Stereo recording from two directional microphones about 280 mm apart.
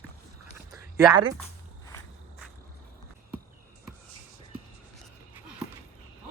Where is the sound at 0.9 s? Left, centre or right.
Centre.